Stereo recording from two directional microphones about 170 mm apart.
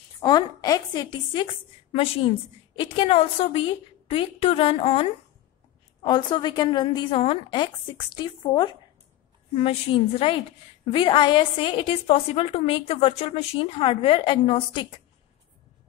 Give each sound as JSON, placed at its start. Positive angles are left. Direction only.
{"t": 0.2, "sound": "a woman's voice", "side_deg": 25}
{"t": 6.0, "sound": "a woman's voice", "side_deg": 25}